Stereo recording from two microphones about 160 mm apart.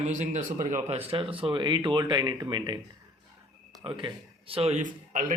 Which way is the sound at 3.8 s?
35° right (ahead or behind).